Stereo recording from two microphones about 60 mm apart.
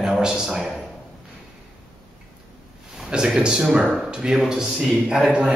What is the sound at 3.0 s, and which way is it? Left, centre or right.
A man's voice, centre.